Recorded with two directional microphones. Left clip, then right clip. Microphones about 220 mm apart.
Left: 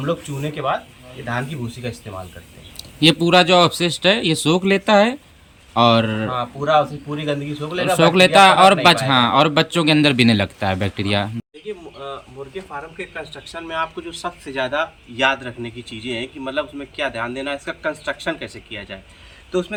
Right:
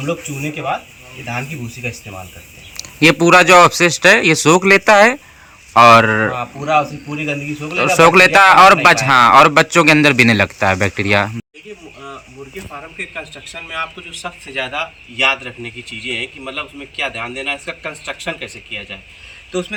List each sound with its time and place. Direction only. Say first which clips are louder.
0.0 s a man's voice: right 2 dB; 5° left (ahead or behind)
2.7 s a man's voice: right 4 dB; 5° right (ahead or behind)
13.7 s a man's voice: even; 15° left (ahead or behind)